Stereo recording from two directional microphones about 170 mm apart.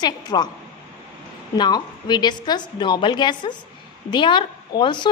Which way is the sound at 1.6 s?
25° left (ahead or behind).